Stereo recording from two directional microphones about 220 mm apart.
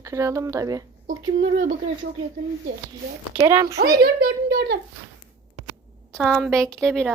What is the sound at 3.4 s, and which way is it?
Speech, 15° right (ahead or behind).